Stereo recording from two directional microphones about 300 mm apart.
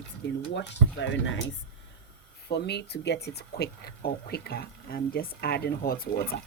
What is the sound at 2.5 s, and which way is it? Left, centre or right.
Speech, left.